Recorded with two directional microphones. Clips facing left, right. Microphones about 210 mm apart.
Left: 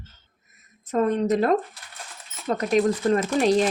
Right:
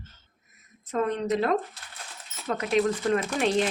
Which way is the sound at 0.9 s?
45° left (ahead or behind).